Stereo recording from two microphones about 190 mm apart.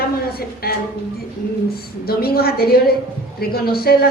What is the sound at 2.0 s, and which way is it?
A woman's voice, 55° left (ahead or behind).